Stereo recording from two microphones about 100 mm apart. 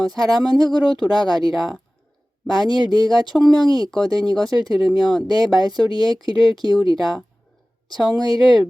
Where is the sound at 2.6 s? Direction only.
45° right (ahead or behind).